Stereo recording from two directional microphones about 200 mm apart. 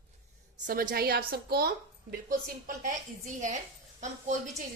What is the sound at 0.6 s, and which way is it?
Speech, 45° right (ahead or behind).